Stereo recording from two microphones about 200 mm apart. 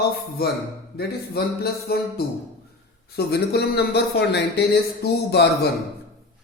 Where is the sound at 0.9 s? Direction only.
50° left (ahead or behind).